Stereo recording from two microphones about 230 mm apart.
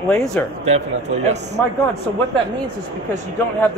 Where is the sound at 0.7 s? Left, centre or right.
Right.